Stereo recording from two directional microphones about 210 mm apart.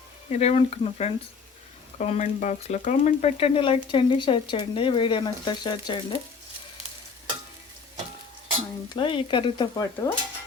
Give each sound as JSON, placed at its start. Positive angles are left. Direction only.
{"t": 0.3, "sound": "speech", "side_deg": 30}
{"t": 8.9, "sound": "speech", "side_deg": 25}